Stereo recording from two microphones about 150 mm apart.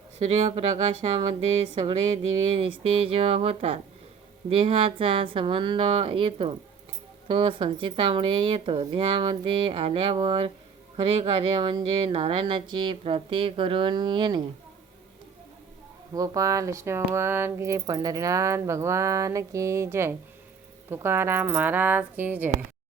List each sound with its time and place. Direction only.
0.2 s speech: 45° right (ahead or behind)
16.1 s speech: 25° right (ahead or behind)